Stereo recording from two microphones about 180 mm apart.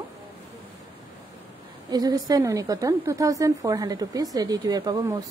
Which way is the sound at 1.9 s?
20° right (ahead or behind).